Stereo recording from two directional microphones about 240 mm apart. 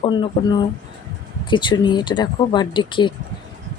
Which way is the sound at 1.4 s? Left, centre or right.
Centre.